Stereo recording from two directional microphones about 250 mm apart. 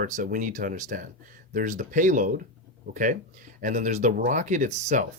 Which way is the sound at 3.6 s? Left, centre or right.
Right.